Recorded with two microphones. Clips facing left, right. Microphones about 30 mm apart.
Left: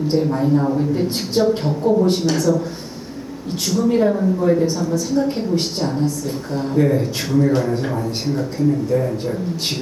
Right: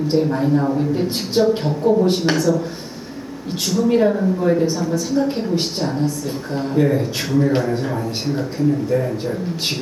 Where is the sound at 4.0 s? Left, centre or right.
Centre.